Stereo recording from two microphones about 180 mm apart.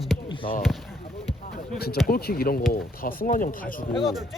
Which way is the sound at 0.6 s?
Centre (ahead or behind).